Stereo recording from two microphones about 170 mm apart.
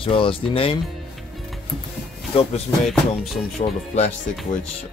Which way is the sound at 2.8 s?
Centre (ahead or behind).